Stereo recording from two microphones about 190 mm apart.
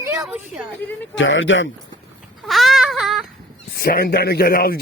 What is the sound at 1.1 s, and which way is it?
Speech, 80° left.